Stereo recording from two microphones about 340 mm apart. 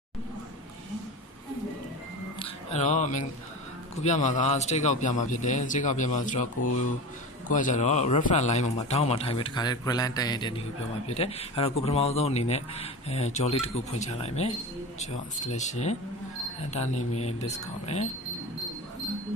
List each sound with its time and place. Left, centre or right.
2.3 s music: centre
4.0 s a man's voice: left
7.5 s a man's voice: left
17.1 s a man's voice: centre